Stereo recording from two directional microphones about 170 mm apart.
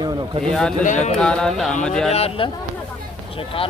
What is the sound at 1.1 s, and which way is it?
Speech, 5° left (ahead or behind).